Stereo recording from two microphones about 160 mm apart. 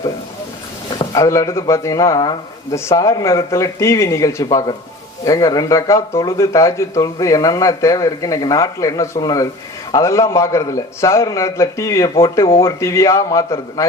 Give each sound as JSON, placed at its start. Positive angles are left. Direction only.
{"t": 0.9, "sound": "a man's voice", "side_deg": 20}